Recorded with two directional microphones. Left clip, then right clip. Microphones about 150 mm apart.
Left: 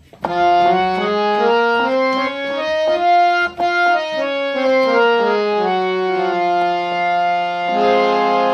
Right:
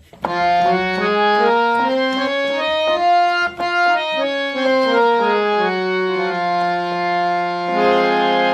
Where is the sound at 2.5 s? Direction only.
20° left (ahead or behind).